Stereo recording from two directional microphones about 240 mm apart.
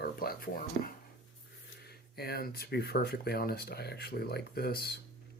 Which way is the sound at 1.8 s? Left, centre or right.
Left.